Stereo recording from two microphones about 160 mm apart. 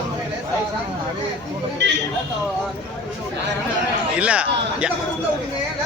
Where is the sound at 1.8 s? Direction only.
90° right.